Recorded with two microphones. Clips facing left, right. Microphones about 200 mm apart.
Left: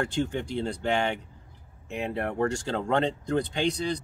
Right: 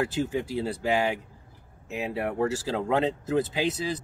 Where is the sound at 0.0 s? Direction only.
5° right (ahead or behind).